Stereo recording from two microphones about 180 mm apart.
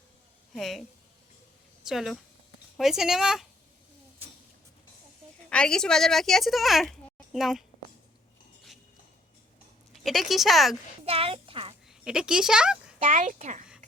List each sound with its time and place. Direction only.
0.5 s speech: centre (ahead or behind)
5.5 s speech: 5° left (ahead or behind)
9.9 s speech: centre (ahead or behind)
11.0 s speech: 30° right (ahead or behind)
11.9 s speech: 5° right (ahead or behind)
13.1 s a child's voice: 45° right (ahead or behind)